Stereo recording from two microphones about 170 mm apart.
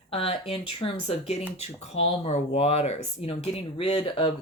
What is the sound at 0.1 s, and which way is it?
Speech, 35° left (ahead or behind).